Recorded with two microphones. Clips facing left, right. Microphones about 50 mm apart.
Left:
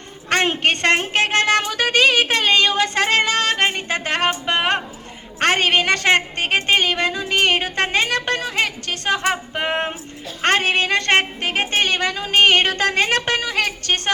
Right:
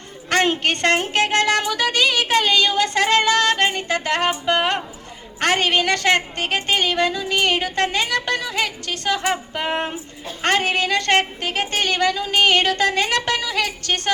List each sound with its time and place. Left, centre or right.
0.3 s a woman's voice: left